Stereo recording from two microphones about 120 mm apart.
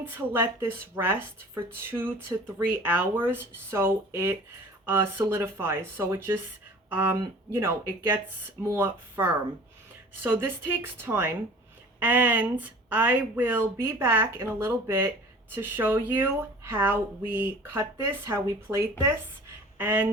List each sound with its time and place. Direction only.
0.0 s speech: 20° right (ahead or behind)